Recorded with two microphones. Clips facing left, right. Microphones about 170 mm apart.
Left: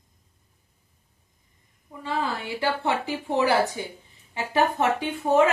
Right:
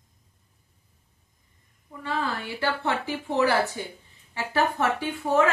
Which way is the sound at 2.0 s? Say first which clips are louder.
Left 1 dB; 15° left (ahead or behind).